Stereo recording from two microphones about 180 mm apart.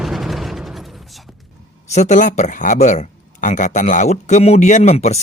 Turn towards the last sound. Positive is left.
turn(degrees=35)  # may be behind; listen again after turning